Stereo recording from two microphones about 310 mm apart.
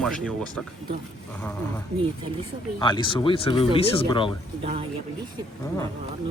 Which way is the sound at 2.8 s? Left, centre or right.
Centre.